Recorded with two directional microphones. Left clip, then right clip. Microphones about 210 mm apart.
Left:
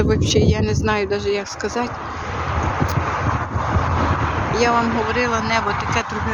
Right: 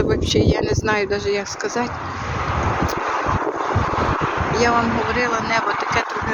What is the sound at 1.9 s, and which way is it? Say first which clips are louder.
Vehicle: right 1 dB; 55° right (ahead or behind).